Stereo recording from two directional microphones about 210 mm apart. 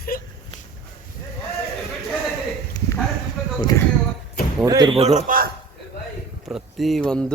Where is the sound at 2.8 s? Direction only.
20° left (ahead or behind).